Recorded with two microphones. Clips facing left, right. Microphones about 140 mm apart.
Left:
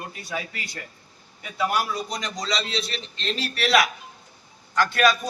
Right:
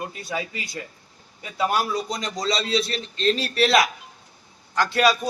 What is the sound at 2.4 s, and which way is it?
A man's voice, 30° right (ahead or behind).